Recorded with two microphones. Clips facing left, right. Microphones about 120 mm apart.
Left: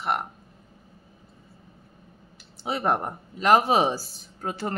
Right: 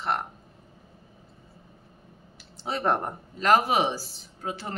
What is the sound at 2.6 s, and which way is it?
Speech, 10° left (ahead or behind).